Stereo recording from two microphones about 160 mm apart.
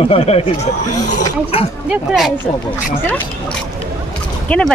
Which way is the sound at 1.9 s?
Centre (ahead or behind).